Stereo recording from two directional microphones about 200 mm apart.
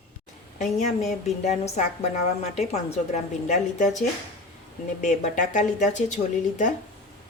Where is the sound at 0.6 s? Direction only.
35° left (ahead or behind).